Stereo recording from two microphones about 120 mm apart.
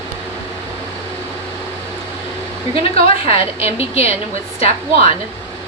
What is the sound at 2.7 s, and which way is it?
A woman's voice, 50° left (ahead or behind).